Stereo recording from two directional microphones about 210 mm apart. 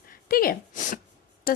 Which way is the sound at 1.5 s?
45° left (ahead or behind).